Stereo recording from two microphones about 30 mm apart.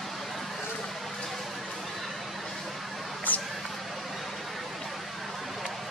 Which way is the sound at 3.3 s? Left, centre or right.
Left.